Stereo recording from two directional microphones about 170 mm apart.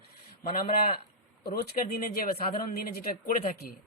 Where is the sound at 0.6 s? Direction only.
60° left (ahead or behind).